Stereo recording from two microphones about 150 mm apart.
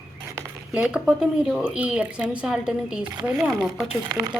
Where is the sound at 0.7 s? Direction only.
5° right (ahead or behind).